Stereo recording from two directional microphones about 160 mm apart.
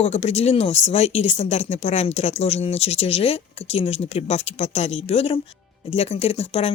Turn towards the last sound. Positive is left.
turn(degrees=40)  # may be behind; listen again after turning